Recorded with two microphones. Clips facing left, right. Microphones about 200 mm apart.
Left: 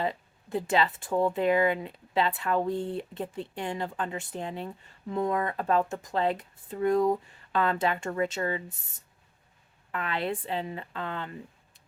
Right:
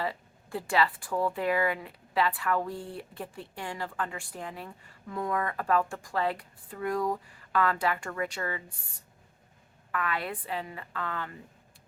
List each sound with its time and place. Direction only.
0.0 s speech: 20° left (ahead or behind)